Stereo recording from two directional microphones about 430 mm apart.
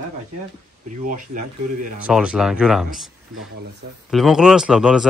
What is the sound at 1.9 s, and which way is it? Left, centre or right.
Speech, centre.